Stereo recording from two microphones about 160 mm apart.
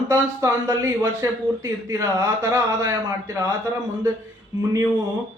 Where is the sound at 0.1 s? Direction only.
20° right (ahead or behind).